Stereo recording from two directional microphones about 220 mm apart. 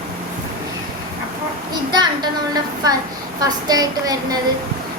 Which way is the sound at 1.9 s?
20° right (ahead or behind).